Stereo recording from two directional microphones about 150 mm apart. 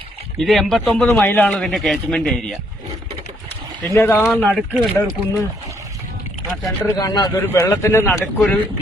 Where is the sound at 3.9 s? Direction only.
15° left (ahead or behind).